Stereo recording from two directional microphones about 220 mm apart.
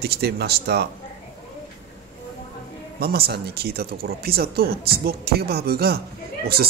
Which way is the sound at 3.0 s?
45° right (ahead or behind).